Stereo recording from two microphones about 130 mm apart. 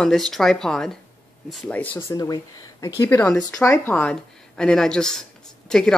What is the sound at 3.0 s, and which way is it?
Speech, 15° left (ahead or behind).